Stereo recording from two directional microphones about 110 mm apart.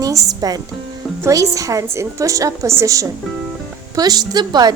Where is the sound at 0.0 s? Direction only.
35° right (ahead or behind).